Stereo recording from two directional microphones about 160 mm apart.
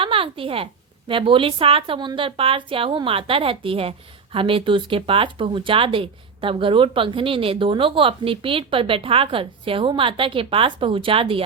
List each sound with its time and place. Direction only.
0.0 s a woman's voice: 35° right (ahead or behind)